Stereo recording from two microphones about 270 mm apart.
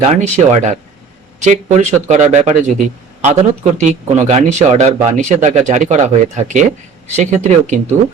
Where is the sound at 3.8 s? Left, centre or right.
Right.